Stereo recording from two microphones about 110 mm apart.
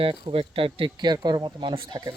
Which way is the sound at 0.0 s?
50° right (ahead or behind).